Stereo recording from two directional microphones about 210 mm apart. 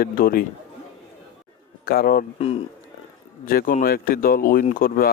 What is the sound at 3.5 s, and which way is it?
Speech, 45° left (ahead or behind).